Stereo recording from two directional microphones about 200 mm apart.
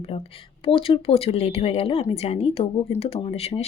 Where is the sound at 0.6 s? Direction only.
25° left (ahead or behind).